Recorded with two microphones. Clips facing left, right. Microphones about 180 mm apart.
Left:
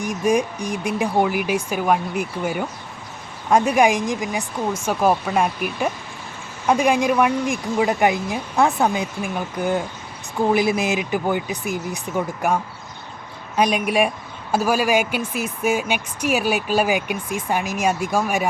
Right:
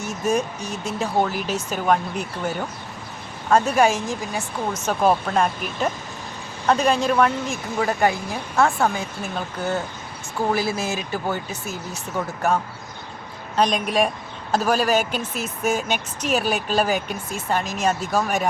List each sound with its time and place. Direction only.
0.0 s speech: 15° left (ahead or behind)